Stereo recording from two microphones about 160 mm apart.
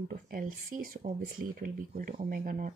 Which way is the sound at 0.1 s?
60° right (ahead or behind).